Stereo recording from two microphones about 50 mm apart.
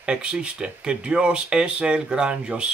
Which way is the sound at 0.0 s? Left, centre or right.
Centre.